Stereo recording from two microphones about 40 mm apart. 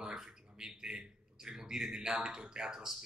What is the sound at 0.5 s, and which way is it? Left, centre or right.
A man's voice, centre.